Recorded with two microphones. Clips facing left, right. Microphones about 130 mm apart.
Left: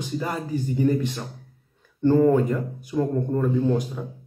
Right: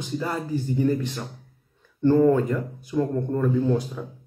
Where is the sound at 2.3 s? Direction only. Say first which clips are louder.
Left 1 dB; 15° left (ahead or behind).